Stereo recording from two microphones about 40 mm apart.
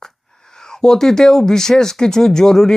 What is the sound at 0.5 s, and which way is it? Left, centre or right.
A man's voice, centre.